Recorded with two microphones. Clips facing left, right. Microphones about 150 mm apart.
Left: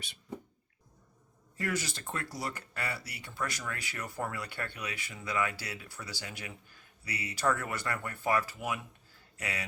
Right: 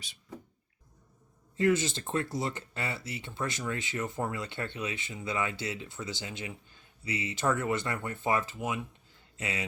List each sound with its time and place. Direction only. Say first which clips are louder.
1.5 s speech: right 9 dB; 25° right (ahead or behind)